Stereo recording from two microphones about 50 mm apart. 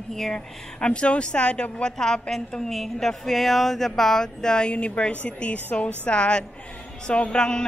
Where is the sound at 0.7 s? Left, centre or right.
Left.